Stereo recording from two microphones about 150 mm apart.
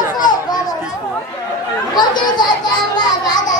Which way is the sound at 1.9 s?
30° left (ahead or behind).